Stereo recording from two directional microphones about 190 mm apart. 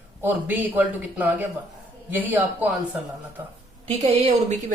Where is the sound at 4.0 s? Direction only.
35° right (ahead or behind).